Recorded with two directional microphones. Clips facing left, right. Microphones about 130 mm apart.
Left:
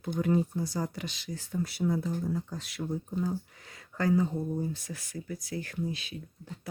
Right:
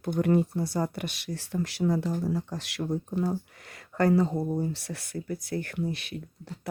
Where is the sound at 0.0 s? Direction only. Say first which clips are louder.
Right 3 dB; 65° right (ahead or behind).